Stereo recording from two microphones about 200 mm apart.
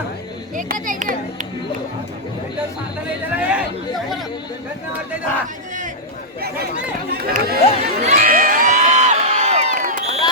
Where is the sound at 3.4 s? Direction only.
5° right (ahead or behind).